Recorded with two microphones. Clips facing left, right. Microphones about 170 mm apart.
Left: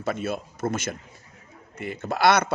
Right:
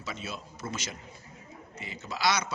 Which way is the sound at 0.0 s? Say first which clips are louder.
Left 11 dB; 55° left (ahead or behind).